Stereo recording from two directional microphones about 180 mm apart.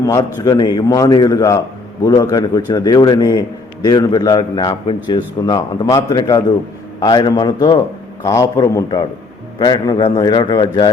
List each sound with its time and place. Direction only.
0.0 s a man's voice: 20° left (ahead or behind)